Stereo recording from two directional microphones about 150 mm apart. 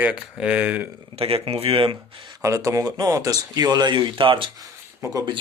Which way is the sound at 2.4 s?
20° right (ahead or behind).